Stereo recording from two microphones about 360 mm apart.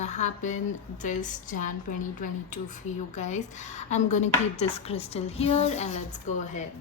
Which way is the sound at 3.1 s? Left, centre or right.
Centre.